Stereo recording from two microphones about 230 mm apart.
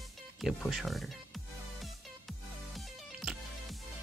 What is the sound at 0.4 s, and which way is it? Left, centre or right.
Speech, centre.